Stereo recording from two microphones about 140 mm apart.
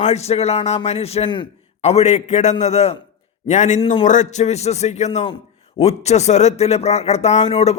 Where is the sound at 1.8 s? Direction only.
50° left (ahead or behind).